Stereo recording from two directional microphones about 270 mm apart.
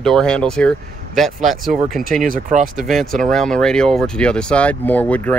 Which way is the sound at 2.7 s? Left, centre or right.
Centre.